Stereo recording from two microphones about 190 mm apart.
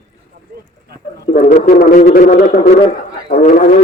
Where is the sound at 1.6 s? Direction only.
50° left (ahead or behind).